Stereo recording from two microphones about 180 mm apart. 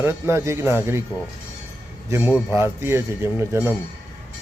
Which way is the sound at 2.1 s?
10° right (ahead or behind).